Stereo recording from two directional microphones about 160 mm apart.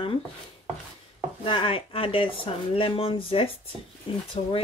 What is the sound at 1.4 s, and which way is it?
Speech, 35° left (ahead or behind).